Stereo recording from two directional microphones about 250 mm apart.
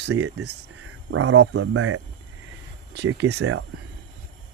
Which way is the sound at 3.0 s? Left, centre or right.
Right.